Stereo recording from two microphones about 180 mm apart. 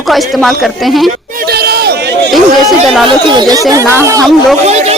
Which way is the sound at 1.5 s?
60° right (ahead or behind).